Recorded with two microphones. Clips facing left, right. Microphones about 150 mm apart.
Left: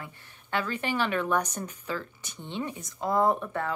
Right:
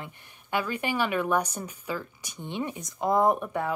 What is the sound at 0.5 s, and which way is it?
Speech, 10° right (ahead or behind).